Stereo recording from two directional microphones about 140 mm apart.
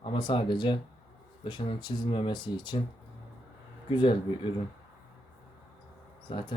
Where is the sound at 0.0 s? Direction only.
35° left (ahead or behind).